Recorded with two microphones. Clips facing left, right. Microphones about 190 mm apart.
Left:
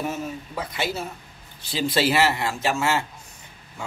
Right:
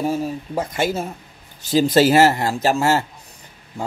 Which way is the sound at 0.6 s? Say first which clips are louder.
Right 7 dB; 45° right (ahead or behind).